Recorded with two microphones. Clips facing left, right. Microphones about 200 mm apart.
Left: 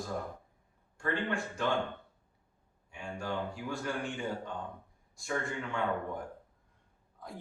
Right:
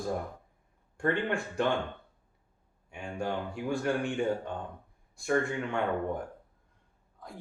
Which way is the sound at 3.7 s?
60° right (ahead or behind).